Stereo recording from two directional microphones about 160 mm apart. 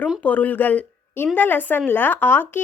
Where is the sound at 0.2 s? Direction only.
10° left (ahead or behind).